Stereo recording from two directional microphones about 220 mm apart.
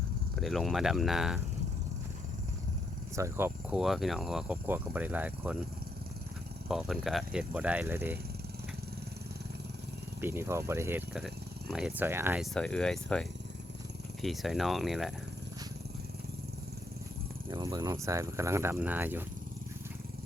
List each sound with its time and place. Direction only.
0.3 s speech: centre (ahead or behind)
3.2 s speech: 10° right (ahead or behind)
6.7 s speech: centre (ahead or behind)
10.2 s speech: 10° right (ahead or behind)
12.5 s speech: 5° left (ahead or behind)
17.5 s speech: 15° right (ahead or behind)